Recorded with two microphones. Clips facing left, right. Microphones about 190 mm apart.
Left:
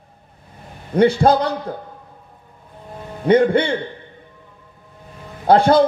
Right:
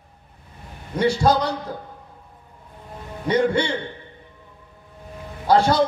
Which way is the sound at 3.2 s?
55° left (ahead or behind).